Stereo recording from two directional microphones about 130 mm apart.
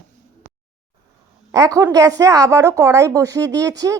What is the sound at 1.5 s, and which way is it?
Speech, 25° right (ahead or behind).